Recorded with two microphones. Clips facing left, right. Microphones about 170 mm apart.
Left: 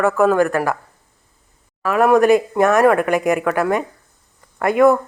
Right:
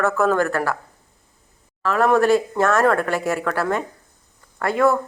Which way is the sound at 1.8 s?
15° left (ahead or behind).